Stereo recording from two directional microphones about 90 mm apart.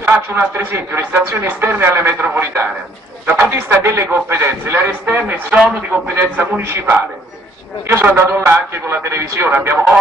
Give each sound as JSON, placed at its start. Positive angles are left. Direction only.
{"t": 0.0, "sound": "speech", "side_deg": -25}
{"t": 9.5, "sound": "speech", "side_deg": -15}